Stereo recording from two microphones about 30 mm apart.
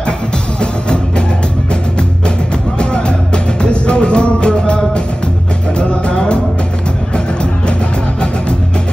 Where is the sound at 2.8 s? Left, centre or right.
Left.